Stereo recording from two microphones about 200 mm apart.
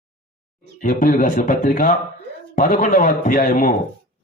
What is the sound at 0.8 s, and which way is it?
Speech, 40° left (ahead or behind).